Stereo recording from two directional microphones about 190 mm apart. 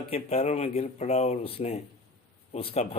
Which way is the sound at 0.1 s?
35° left (ahead or behind).